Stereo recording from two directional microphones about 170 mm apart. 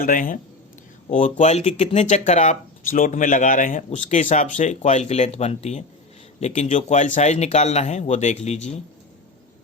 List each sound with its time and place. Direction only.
0.0 s speech: 55° left (ahead or behind)